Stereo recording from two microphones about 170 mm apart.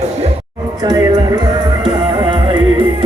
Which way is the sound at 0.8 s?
20° right (ahead or behind).